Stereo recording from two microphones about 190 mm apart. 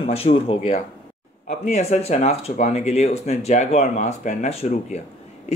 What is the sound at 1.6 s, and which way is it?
Speech, 35° left (ahead or behind).